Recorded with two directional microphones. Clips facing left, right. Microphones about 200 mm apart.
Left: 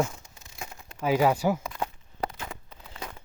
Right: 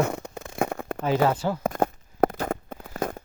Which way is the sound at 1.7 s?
50° right (ahead or behind).